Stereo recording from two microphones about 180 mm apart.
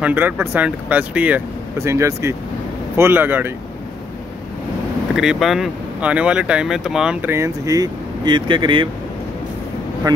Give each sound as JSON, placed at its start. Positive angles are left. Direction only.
{"t": 0.0, "sound": "speech", "side_deg": -10}
{"t": 5.1, "sound": "speech", "side_deg": -5}
{"t": 10.1, "sound": "speech", "side_deg": -20}